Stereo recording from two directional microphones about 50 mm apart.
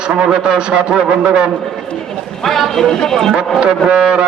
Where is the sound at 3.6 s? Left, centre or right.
Centre.